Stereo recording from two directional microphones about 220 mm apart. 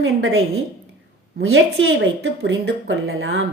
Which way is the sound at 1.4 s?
55° right (ahead or behind).